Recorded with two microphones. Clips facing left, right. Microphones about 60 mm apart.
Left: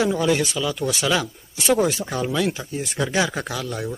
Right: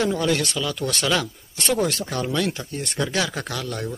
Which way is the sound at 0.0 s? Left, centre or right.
Centre.